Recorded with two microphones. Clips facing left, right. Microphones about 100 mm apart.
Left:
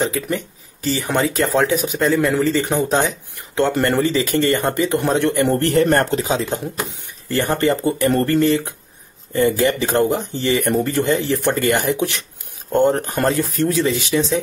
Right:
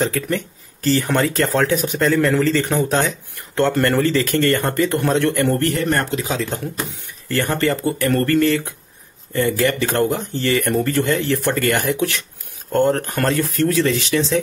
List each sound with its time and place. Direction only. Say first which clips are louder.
0.0 s speech: even; 10° left (ahead or behind)
5.7 s speech: left 5 dB; 40° left (ahead or behind)
6.2 s speech: left 2 dB; 25° left (ahead or behind)